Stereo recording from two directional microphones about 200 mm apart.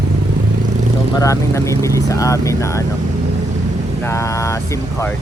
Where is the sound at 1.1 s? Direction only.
15° left (ahead or behind).